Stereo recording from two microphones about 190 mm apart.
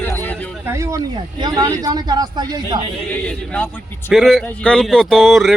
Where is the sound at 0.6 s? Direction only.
15° right (ahead or behind).